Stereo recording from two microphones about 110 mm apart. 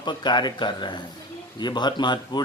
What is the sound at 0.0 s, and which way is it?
Speech, 45° left (ahead or behind).